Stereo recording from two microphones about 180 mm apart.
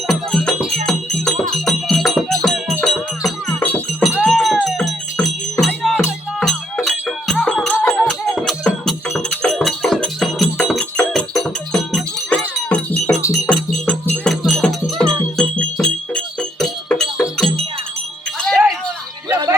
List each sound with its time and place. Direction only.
0.1 s music: 5° left (ahead or behind)
18.3 s wind chime: centre (ahead or behind)
19.3 s a sound: 25° right (ahead or behind)